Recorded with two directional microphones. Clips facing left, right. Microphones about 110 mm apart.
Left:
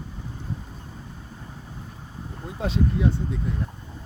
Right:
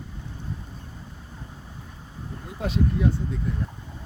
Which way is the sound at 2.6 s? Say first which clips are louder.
Even; 25° left (ahead or behind).